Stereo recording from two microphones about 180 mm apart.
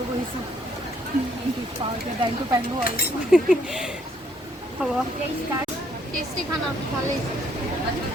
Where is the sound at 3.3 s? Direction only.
Centre (ahead or behind).